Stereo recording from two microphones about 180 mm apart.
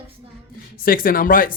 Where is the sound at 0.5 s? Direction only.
55° left (ahead or behind).